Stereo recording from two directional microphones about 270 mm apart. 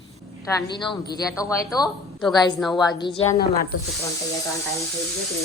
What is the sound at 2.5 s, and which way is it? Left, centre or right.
Speech, centre.